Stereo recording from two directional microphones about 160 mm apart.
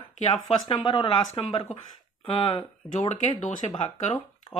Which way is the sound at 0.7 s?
30° left (ahead or behind).